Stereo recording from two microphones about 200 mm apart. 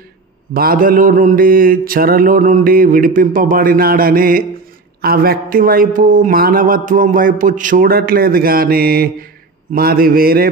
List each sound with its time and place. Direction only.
0.5 s a man's voice: 45° right (ahead or behind)